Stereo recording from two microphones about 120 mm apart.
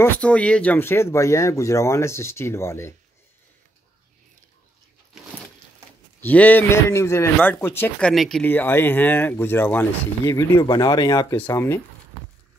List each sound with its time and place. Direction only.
0.2 s speech: 10° left (ahead or behind)
6.2 s speech: 15° left (ahead or behind)
8.0 s speech: centre (ahead or behind)
8.5 s speech: 15° left (ahead or behind)
10.6 s speech: 35° left (ahead or behind)
11.3 s speech: 20° left (ahead or behind)